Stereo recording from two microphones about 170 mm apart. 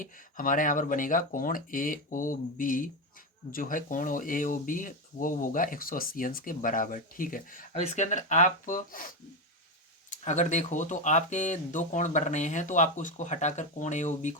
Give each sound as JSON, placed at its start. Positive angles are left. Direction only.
{"t": 0.0, "sound": "speech", "side_deg": 50}